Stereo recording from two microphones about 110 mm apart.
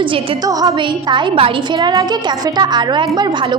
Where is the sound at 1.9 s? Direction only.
35° right (ahead or behind).